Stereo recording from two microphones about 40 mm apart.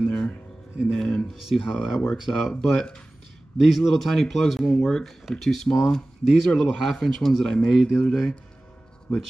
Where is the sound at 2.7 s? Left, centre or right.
Left.